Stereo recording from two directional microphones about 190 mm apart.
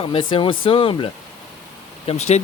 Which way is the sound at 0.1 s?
25° left (ahead or behind).